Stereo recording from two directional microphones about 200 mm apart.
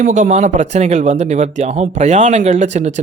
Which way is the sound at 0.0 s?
40° right (ahead or behind).